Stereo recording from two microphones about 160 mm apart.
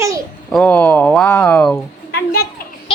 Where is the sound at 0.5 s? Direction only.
10° left (ahead or behind).